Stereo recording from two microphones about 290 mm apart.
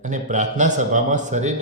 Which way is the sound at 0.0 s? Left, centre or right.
Right.